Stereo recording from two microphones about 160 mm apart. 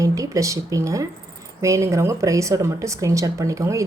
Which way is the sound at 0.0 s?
20° right (ahead or behind).